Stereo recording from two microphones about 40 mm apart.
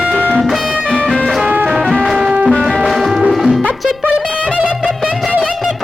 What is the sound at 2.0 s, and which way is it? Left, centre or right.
Music, centre.